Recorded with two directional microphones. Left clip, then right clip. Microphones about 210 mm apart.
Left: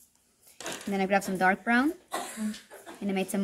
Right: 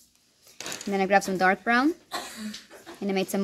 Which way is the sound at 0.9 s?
45° right (ahead or behind).